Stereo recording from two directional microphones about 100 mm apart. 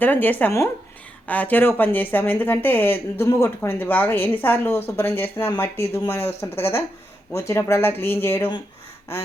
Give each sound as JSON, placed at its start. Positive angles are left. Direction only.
{"t": 0.0, "sound": "speech", "side_deg": 20}